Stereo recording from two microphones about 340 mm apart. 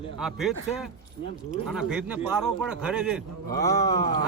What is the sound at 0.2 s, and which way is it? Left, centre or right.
A man's voice, centre.